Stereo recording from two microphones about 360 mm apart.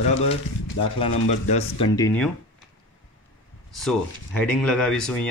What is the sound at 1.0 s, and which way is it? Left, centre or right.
Speech, centre.